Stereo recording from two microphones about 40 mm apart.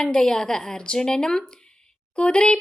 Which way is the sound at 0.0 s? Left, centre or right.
Centre.